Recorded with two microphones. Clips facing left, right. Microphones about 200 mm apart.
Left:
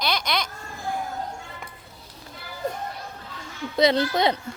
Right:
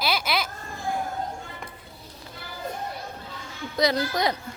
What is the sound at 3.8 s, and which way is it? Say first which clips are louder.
Speech: left 4 dB; 25° left (ahead or behind).